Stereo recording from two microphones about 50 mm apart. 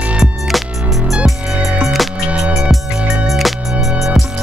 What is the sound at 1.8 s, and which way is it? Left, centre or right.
Music, centre.